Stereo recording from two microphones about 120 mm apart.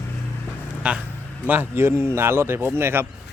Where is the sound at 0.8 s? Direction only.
10° right (ahead or behind).